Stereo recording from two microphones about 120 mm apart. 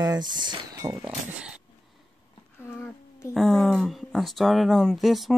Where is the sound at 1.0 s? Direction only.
10° right (ahead or behind).